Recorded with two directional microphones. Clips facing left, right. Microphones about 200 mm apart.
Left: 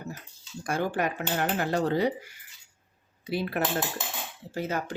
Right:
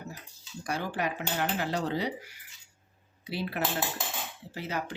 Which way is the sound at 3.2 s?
50° left (ahead or behind).